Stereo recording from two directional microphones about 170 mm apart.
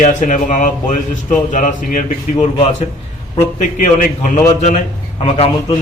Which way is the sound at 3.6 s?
50° left (ahead or behind).